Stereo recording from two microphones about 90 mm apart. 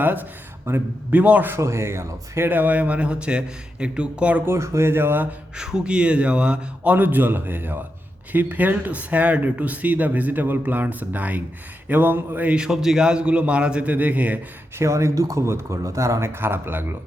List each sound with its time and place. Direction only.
0.7 s a man's voice: 25° right (ahead or behind)
2.5 s speech: 20° right (ahead or behind)
4.4 s a man's voice: 30° right (ahead or behind)
5.5 s speech: 10° right (ahead or behind)
14.8 s speech: 35° right (ahead or behind)